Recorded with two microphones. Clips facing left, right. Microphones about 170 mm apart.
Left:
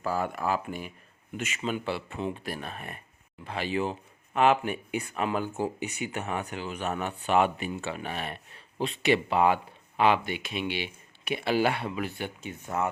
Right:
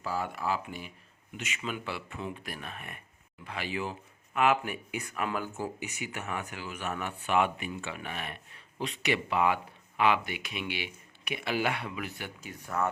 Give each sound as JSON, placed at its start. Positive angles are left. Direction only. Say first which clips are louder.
{"t": 0.0, "sound": "speech", "louder": "left 4 dB", "side_deg": 50}
{"t": 1.6, "sound": "speech", "louder": "left 6 dB", "side_deg": 30}
{"t": 5.8, "sound": "speech", "louder": "left 5 dB", "side_deg": 35}